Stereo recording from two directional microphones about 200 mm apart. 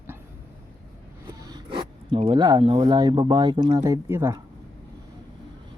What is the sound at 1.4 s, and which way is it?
Speech, 20° right (ahead or behind).